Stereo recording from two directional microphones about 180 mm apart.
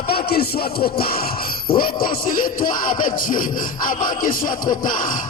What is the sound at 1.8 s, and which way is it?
Music, 55° left (ahead or behind).